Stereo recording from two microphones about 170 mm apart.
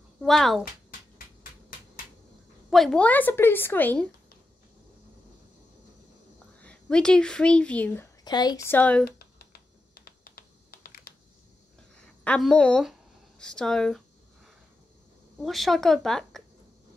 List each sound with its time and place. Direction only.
0.2 s a woman's voice: centre (ahead or behind)
2.7 s a woman's voice: 5° left (ahead or behind)
6.6 s speech: 5° left (ahead or behind)
8.2 s a woman's voice: 25° left (ahead or behind)
9.0 s computer keyboard: 65° left (ahead or behind)
12.3 s a woman's voice: 5° left (ahead or behind)
13.4 s a sound: 5° left (ahead or behind)
15.4 s a woman's voice: centre (ahead or behind)